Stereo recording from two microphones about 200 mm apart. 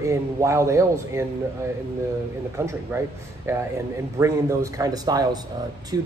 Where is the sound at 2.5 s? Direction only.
15° right (ahead or behind).